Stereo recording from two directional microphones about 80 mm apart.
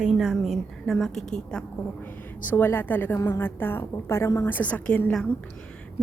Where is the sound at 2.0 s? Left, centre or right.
Left.